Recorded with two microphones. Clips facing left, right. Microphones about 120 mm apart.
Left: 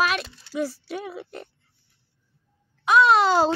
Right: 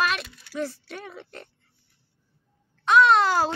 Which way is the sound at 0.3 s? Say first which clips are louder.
Left 3 dB; 30° left (ahead or behind).